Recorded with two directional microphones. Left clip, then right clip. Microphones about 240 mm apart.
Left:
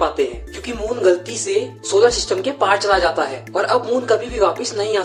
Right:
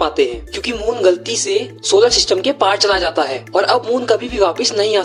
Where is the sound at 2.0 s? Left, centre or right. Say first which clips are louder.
Right 1 dB; right.